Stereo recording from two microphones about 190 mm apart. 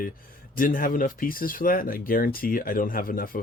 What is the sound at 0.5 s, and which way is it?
Speech, 45° left (ahead or behind).